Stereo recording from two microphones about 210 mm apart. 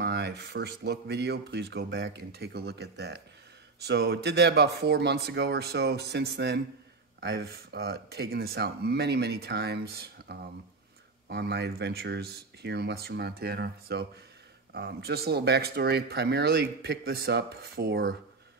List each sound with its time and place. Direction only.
0.0 s speech: 50° right (ahead or behind)